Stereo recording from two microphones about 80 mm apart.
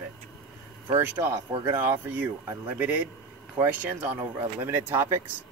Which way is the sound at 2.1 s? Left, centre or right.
Right.